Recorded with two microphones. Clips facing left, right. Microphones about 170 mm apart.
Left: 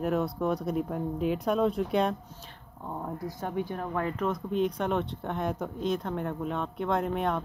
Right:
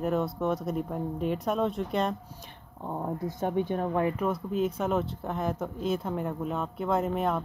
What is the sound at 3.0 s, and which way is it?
Speech, 20° right (ahead or behind).